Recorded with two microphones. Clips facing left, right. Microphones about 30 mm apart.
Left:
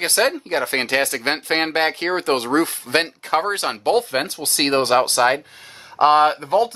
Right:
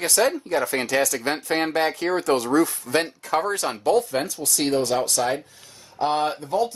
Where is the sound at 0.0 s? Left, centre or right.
Left.